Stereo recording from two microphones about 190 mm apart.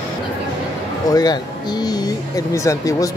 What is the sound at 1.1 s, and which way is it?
Speech, 20° left (ahead or behind).